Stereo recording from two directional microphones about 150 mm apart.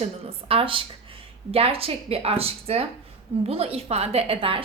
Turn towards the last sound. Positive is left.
turn(degrees=-40)  # may be behind; listen again after turning